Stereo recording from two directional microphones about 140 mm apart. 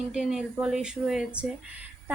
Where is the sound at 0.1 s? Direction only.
5° right (ahead or behind).